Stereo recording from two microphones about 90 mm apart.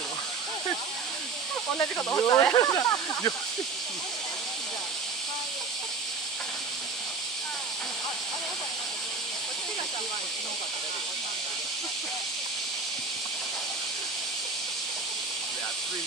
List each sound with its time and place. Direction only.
1.8 s speech: 30° left (ahead or behind)
2.5 s speech: 40° left (ahead or behind)